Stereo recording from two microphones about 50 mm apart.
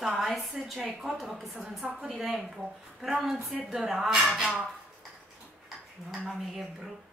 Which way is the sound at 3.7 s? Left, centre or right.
Centre.